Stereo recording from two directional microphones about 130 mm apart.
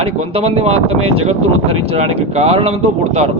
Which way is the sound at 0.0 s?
50° right (ahead or behind).